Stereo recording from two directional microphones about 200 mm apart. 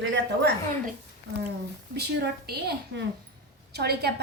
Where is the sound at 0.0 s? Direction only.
65° right (ahead or behind).